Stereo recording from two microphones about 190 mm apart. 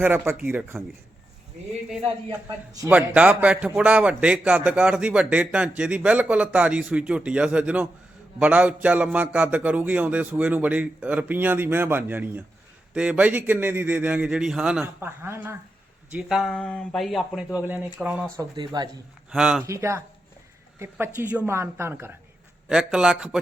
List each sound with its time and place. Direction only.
0.0 s a man's voice: 10° right (ahead or behind)
2.7 s a man's voice: 10° right (ahead or behind)
16.1 s speech: centre (ahead or behind)
18.3 s speech: 20° right (ahead or behind)
19.3 s speech: centre (ahead or behind)
19.6 s a man's voice: 15° right (ahead or behind)